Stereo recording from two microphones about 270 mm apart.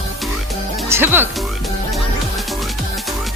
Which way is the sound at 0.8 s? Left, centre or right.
Centre.